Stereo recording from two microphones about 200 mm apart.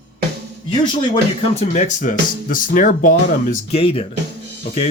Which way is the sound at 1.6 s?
35° left (ahead or behind).